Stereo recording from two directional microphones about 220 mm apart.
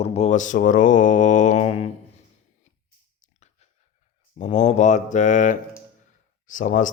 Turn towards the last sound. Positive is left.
turn(degrees=35)  # may be behind; listen again after turning